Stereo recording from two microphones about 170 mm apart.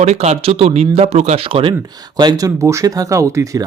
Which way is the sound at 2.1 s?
25° right (ahead or behind).